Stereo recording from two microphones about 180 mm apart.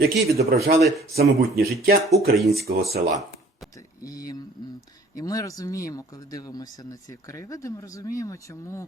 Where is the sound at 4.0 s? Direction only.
20° left (ahead or behind).